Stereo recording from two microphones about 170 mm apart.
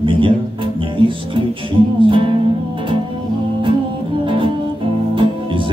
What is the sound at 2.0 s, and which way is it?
Music, 30° right (ahead or behind).